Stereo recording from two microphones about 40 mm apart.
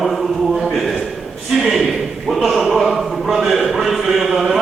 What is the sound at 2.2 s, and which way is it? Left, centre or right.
A man's voice, centre.